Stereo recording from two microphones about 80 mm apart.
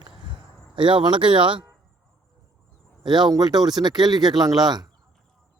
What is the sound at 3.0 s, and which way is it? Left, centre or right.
Speech, right.